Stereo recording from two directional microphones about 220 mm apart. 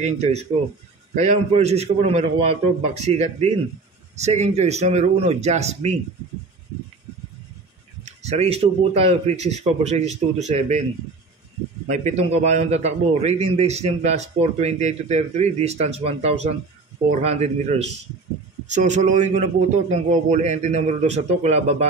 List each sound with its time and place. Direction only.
0.0 s a man's voice: 30° right (ahead or behind)
8.0 s a man's voice: 30° right (ahead or behind)
11.9 s a man's voice: 30° right (ahead or behind)